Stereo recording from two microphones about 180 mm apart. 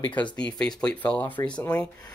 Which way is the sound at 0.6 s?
5° left (ahead or behind).